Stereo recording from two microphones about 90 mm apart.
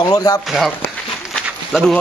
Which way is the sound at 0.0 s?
45° left (ahead or behind).